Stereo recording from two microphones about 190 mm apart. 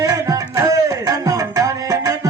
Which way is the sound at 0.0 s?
15° right (ahead or behind).